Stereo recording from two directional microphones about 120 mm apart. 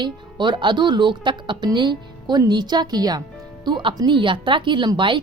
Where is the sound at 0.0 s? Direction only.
40° right (ahead or behind).